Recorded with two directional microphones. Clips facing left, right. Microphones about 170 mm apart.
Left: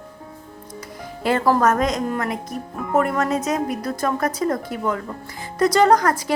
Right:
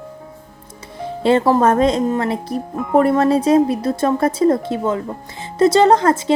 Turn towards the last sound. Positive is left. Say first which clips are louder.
# right 3 dB
turn(degrees=-25)  # may be behind; listen again after turning